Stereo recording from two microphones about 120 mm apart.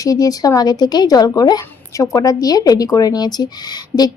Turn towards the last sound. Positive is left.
turn(degrees=35)  # may be behind; listen again after turning